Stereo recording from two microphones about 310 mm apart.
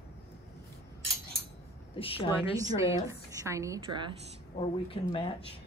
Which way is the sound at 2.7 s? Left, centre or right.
Centre.